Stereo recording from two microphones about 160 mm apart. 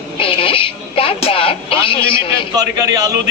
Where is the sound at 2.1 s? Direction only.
25° right (ahead or behind).